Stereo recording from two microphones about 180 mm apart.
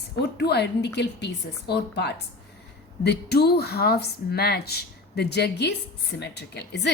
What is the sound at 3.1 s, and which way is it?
A woman's voice, 65° left (ahead or behind).